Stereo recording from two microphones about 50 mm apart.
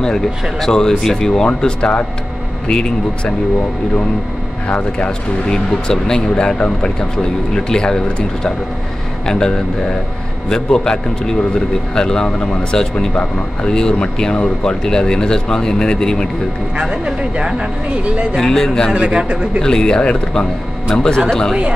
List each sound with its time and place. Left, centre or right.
0.0 s speech: centre
4.6 s speech: left
16.9 s a man's voice: centre
18.4 s speech: centre
18.9 s a man's voice: right
19.6 s speech: centre